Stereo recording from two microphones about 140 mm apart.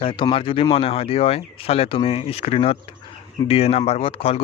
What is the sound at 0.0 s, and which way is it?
Speech, 35° left (ahead or behind).